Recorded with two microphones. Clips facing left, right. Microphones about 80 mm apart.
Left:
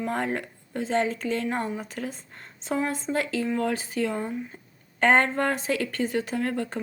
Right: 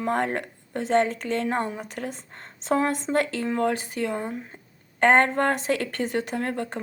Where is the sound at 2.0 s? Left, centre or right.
Right.